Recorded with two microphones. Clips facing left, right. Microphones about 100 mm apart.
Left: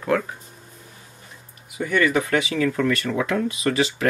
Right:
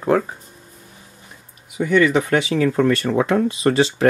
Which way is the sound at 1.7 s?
25° right (ahead or behind).